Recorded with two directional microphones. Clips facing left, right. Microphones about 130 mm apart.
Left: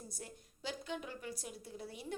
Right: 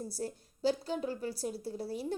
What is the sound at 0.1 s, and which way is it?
Speech, 35° right (ahead or behind).